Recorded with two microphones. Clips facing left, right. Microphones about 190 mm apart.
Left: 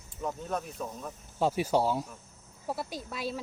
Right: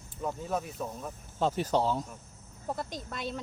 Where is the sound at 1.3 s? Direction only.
10° left (ahead or behind).